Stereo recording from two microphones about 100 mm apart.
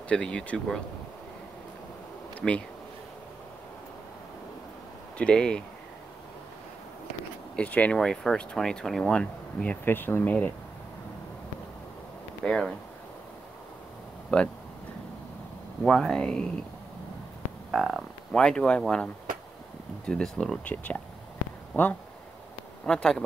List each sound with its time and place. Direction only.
0.1 s speech: 10° left (ahead or behind)
2.4 s speech: 10° left (ahead or behind)
5.1 s speech: 10° left (ahead or behind)
7.5 s speech: 15° left (ahead or behind)
12.4 s speech: 5° left (ahead or behind)
14.3 s speech: 10° left (ahead or behind)
15.8 s speech: 5° left (ahead or behind)
17.6 s speech: centre (ahead or behind)
20.1 s speech: 10° left (ahead or behind)